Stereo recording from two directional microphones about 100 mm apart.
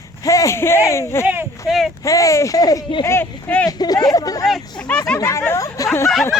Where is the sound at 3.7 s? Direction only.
40° left (ahead or behind).